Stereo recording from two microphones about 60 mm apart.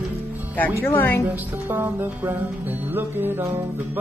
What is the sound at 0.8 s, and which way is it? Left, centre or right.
Speech, left.